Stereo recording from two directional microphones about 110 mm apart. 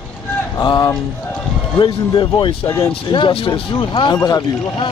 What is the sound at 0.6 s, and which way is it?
Speech, 45° left (ahead or behind).